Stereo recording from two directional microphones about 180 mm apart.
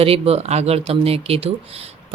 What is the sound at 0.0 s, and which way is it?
Speech, 35° right (ahead or behind).